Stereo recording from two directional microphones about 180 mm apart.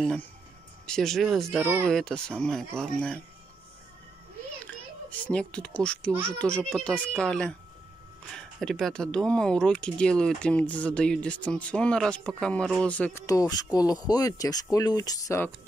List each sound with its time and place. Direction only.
0.8 s speech: 5° left (ahead or behind)
1.6 s speech: 15° right (ahead or behind)
1.9 s speech: 5° left (ahead or behind)
5.2 s speech: 5° left (ahead or behind)
13.3 s speech: 20° left (ahead or behind)